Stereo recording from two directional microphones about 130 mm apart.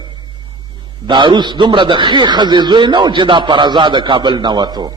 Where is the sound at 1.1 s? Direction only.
35° right (ahead or behind).